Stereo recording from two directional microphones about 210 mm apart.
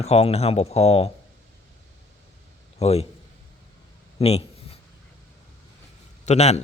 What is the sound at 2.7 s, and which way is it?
Speech, 30° left (ahead or behind).